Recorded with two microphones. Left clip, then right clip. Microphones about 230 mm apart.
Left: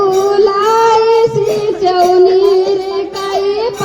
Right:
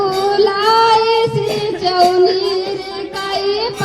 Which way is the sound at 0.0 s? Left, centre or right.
Right.